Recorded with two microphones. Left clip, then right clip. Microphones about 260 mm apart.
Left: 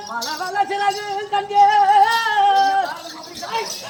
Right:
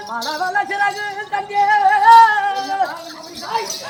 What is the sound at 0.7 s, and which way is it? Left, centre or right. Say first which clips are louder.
Speech: right 1 dB; centre.